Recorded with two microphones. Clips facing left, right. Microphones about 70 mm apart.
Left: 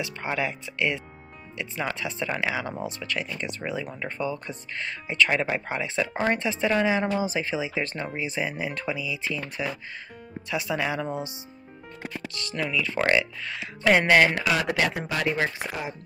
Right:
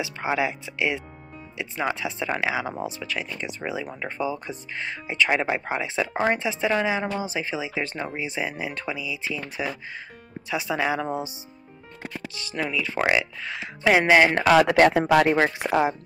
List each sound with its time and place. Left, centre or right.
0.0 s speech: centre
14.3 s speech: right